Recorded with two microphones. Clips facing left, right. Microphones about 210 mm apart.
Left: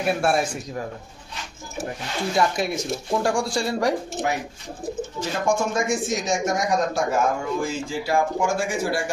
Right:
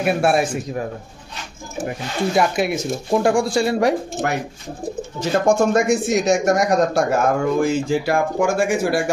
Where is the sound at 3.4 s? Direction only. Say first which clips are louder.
Right 5 dB; 20° right (ahead or behind).